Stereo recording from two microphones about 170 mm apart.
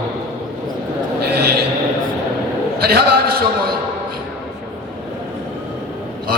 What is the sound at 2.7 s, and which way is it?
Speech, 65° right (ahead or behind).